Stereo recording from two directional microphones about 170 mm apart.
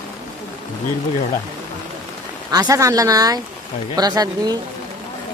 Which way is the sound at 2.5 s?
20° right (ahead or behind).